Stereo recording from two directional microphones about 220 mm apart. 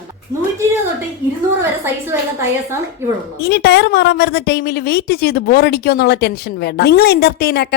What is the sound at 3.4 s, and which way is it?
A woman's voice, 50° left (ahead or behind).